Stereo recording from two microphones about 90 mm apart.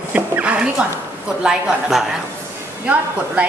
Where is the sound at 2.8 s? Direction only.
15° right (ahead or behind).